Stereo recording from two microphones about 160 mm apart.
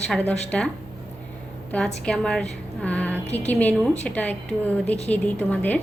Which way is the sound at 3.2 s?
45° left (ahead or behind).